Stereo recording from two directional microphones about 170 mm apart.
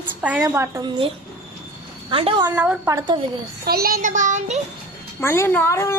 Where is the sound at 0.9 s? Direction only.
30° right (ahead or behind).